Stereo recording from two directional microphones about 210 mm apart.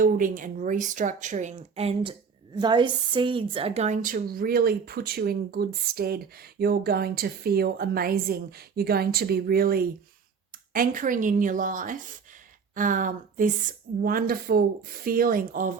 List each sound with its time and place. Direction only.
0.0 s a woman's voice: 40° right (ahead or behind)